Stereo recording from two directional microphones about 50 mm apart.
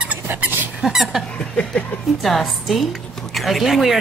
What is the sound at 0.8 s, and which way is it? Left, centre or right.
Speech, centre.